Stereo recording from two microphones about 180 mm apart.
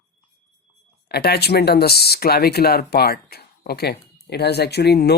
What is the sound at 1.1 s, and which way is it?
Speech, 60° left (ahead or behind).